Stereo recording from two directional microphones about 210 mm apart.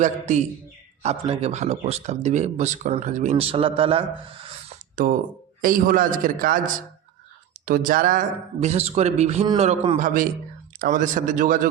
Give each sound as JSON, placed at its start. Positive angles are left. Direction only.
{"t": 0.0, "sound": "speech", "side_deg": -35}
{"t": 5.0, "sound": "speech", "side_deg": -40}
{"t": 7.6, "sound": "speech", "side_deg": -40}
{"t": 10.8, "sound": "speech", "side_deg": -40}